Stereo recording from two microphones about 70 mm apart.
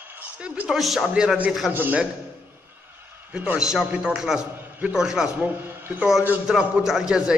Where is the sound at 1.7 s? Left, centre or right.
Right.